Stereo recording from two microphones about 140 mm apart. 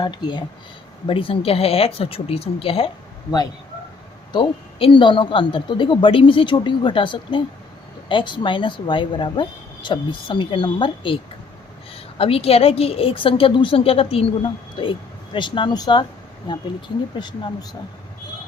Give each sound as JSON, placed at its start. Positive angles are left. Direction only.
{"t": 0.0, "sound": "a woman's voice", "side_deg": 30}
{"t": 4.3, "sound": "a woman's voice", "side_deg": 35}
{"t": 17.2, "sound": "a woman's voice", "side_deg": 30}